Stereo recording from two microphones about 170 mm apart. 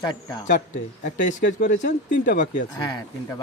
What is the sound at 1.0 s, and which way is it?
Speech, 50° left (ahead or behind).